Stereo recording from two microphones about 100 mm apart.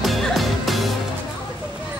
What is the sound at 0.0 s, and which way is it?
Music, centre (ahead or behind).